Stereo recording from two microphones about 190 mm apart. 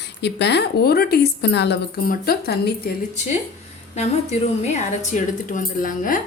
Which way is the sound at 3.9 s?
35° left (ahead or behind).